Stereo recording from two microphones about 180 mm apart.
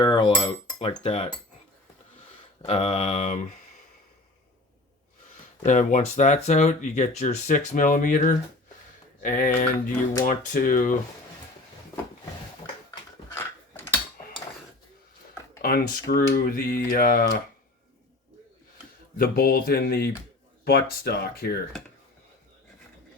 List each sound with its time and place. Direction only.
0.0 s cutlery: 25° left (ahead or behind)
1.0 s speech: 30° left (ahead or behind)
2.6 s speech: 35° left (ahead or behind)
5.6 s speech: 45° left (ahead or behind)
13.3 s a sound: 10° left (ahead or behind)
15.6 s speech: 55° left (ahead or behind)
19.1 s speech: 55° left (ahead or behind)